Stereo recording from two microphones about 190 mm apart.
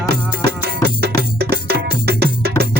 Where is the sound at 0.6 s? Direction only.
55° right (ahead or behind).